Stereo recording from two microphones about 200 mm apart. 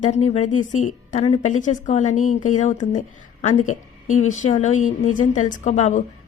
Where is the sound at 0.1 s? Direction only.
35° left (ahead or behind).